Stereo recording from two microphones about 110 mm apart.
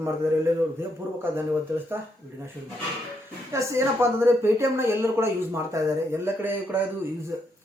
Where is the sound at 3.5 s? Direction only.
25° right (ahead or behind).